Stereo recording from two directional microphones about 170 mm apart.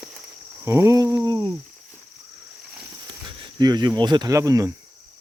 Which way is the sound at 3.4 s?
25° right (ahead or behind).